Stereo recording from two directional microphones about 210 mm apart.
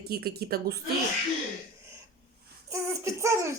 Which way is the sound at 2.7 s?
15° right (ahead or behind).